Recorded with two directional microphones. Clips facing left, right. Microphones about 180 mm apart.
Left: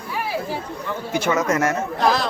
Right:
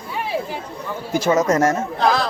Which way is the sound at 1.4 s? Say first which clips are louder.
Right 4 dB; 45° right (ahead or behind).